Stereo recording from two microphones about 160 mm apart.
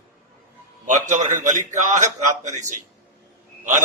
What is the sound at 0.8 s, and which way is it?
A man's voice, 50° right (ahead or behind).